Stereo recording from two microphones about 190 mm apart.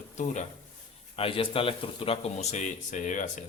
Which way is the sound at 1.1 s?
30° left (ahead or behind).